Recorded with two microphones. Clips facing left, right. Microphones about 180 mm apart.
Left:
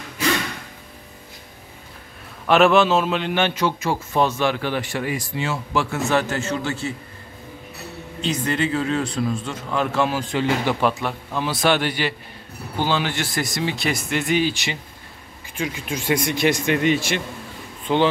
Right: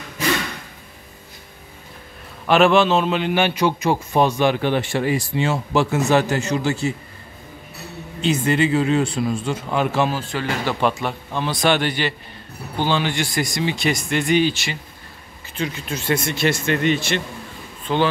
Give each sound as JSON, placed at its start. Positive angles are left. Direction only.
{"t": 2.4, "sound": "a man's voice", "side_deg": 0}
{"t": 8.2, "sound": "a man's voice", "side_deg": -5}
{"t": 10.3, "sound": "speech", "side_deg": 20}
{"t": 10.8, "sound": "speech", "side_deg": 0}
{"t": 14.5, "sound": "speech", "side_deg": 20}